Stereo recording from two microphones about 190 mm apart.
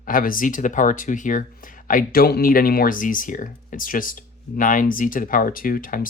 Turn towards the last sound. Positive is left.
turn(degrees=45)  # may be behind; listen again after turning